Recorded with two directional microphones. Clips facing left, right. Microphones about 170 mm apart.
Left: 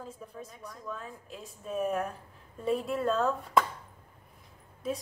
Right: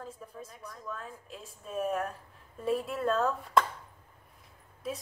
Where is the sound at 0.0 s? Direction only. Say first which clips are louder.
Left 1 dB; centre (ahead or behind).